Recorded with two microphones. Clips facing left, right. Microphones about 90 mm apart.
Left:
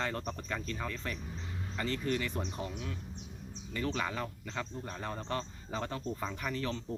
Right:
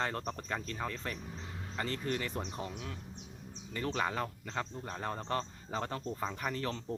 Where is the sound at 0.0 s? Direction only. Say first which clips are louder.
Even; 30° right (ahead or behind).